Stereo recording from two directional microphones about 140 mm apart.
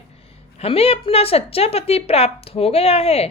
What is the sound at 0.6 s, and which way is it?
A woman's voice, 45° left (ahead or behind).